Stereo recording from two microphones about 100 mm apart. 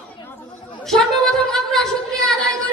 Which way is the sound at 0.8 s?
5° left (ahead or behind).